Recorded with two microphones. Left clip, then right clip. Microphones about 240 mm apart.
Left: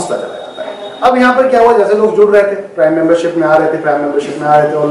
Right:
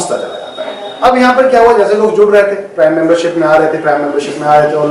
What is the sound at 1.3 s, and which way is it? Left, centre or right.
A man's voice, centre.